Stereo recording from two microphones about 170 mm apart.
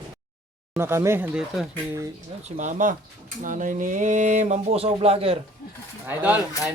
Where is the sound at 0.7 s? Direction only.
15° right (ahead or behind).